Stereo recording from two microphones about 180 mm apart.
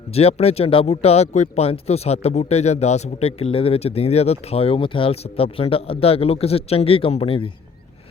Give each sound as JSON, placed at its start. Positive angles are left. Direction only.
{"t": 0.1, "sound": "speech", "side_deg": 35}